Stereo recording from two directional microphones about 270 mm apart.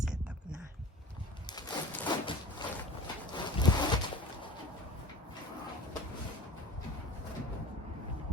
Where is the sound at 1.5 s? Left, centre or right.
Centre.